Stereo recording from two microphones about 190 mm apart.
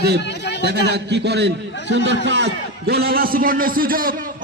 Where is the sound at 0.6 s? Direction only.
60° right (ahead or behind).